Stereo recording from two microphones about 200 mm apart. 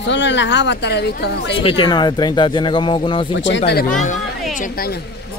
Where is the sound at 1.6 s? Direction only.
25° left (ahead or behind).